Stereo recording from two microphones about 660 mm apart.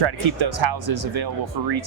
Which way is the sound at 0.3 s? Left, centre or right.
Right.